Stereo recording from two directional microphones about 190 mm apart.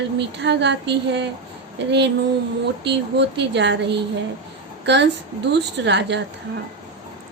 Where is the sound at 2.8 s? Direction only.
65° right (ahead or behind).